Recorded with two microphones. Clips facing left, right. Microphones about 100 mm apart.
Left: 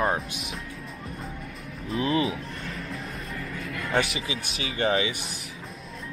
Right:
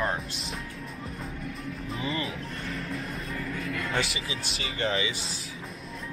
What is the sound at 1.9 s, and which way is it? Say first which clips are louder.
Speech: left 8 dB; 5° left (ahead or behind).